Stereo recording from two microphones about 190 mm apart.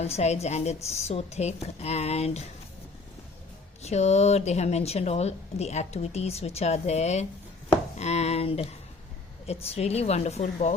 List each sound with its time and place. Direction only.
0.0 s speech: 35° left (ahead or behind)
3.8 s speech: 35° left (ahead or behind)